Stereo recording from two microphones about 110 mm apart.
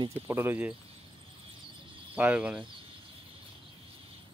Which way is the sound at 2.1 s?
10° right (ahead or behind).